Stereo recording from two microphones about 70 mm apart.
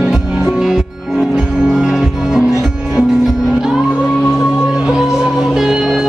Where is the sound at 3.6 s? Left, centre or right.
Centre.